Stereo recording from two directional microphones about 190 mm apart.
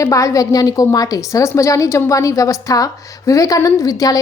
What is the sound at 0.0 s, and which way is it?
A woman's voice, 15° left (ahead or behind).